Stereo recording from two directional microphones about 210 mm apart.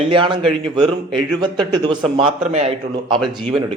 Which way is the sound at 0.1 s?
25° right (ahead or behind).